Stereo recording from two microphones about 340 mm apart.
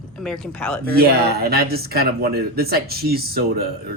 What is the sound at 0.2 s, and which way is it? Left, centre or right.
Speech, centre.